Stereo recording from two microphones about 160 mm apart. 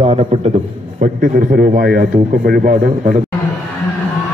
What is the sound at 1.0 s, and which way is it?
Speech, 60° right (ahead or behind).